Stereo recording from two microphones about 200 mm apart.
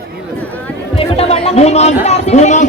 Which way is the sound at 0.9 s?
30° left (ahead or behind).